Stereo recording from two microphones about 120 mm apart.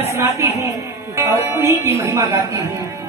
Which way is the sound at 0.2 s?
20° right (ahead or behind).